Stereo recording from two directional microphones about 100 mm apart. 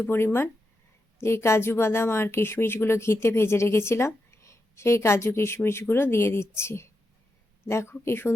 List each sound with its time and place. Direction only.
0.0 s speech: 20° left (ahead or behind)